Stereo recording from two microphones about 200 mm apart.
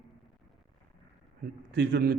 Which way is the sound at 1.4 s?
55° right (ahead or behind).